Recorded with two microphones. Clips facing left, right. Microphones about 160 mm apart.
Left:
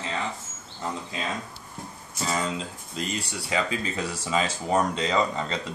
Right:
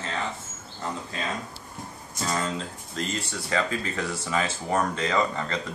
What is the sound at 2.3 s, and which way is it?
Speech, 5° left (ahead or behind).